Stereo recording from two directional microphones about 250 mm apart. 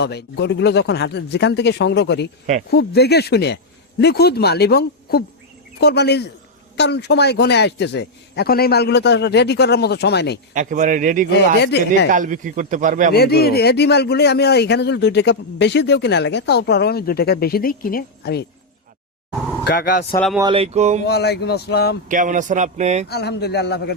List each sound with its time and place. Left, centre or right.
0.0 s speech: left
10.5 s a man's voice: right
11.6 s speech: left
12.1 s a man's voice: right
13.1 s speech: left
19.6 s speech: left
20.1 s speech: centre
20.4 s a man's voice: right
21.0 s speech: left
22.1 s a man's voice: right
23.0 s speech: left